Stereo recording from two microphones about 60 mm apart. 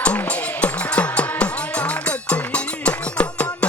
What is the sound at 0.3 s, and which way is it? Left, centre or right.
Music, left.